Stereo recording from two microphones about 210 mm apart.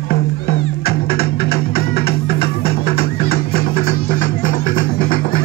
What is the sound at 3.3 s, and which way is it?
Music, 45° left (ahead or behind).